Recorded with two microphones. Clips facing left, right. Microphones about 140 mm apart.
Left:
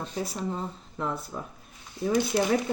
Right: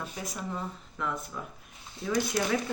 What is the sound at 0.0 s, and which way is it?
Speech, 30° left (ahead or behind).